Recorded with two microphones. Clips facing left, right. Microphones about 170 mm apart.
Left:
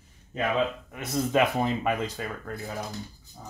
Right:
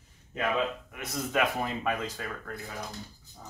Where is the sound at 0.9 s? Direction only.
30° left (ahead or behind).